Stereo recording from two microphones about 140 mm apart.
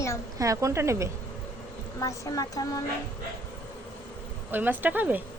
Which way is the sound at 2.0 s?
25° left (ahead or behind).